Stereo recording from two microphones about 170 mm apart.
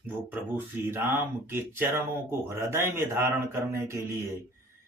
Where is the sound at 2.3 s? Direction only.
15° right (ahead or behind).